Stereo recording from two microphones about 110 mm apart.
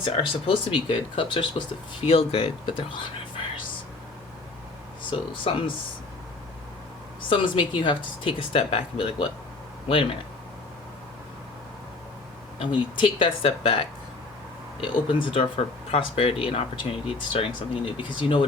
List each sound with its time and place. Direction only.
0.0 s speech: 50° left (ahead or behind)
2.0 s speech: 65° left (ahead or behind); by 3.4 s 50° left (ahead or behind)
5.1 s speech: 55° left (ahead or behind)
7.3 s speech: 50° left (ahead or behind)
12.5 s speech: 50° left (ahead or behind)
15.2 s speech: 50° left (ahead or behind)